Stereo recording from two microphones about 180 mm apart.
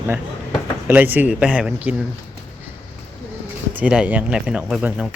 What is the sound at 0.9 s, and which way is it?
Speech, 10° right (ahead or behind).